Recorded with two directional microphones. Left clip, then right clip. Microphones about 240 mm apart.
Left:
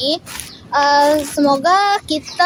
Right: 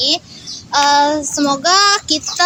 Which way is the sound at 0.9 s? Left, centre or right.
Centre.